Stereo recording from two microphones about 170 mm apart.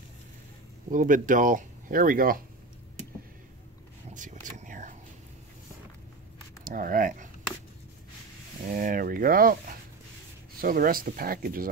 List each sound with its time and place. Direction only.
0.8 s speech: 50° right (ahead or behind)
4.1 s vehicle: 50° right (ahead or behind)
6.6 s speech: 55° right (ahead or behind)
8.7 s speech: 55° right (ahead or behind)